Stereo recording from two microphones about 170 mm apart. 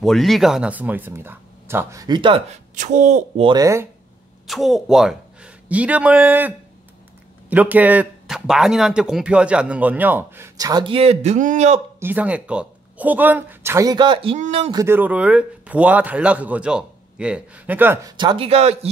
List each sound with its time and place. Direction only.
0.0 s speech: centre (ahead or behind); by 2.6 s 30° right (ahead or behind)
2.7 s speech: 45° right (ahead or behind)
3.4 s speech: 20° right (ahead or behind)
4.5 s a man's voice: centre (ahead or behind); by 11.8 s 40° right (ahead or behind)
12.0 s speech: 10° right (ahead or behind); by 14.7 s 35° right (ahead or behind)
14.7 s speech: 15° right (ahead or behind)
18.1 s speech: 30° right (ahead or behind)